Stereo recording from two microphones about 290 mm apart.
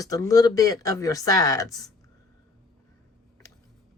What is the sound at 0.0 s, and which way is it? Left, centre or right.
A woman's voice, centre.